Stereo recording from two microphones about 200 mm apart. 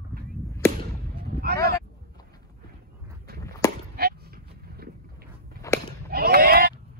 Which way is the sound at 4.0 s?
50° right (ahead or behind).